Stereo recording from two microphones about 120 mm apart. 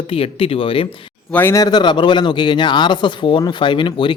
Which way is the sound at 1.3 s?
20° left (ahead or behind).